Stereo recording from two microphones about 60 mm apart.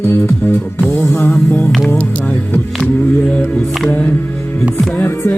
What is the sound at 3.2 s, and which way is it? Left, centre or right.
Music, centre.